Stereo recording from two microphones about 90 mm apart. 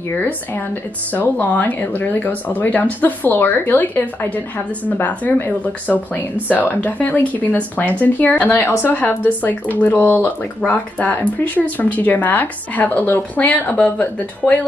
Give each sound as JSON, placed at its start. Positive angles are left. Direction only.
{"t": 1.1, "sound": "speech", "side_deg": 20}
{"t": 6.5, "sound": "speech", "side_deg": 20}